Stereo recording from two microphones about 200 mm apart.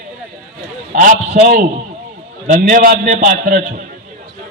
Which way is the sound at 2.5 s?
45° right (ahead or behind).